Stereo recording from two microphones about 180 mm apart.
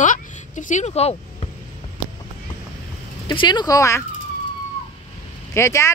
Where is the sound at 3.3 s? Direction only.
25° left (ahead or behind).